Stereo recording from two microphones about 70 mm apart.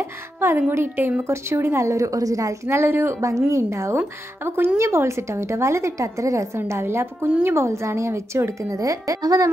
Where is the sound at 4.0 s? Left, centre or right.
Right.